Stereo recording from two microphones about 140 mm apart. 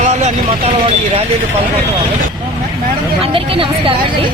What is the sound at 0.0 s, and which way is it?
Speech, 55° right (ahead or behind).